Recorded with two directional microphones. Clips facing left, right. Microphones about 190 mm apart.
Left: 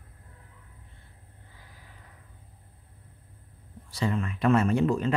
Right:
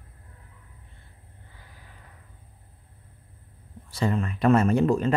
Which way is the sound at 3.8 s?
45° right (ahead or behind).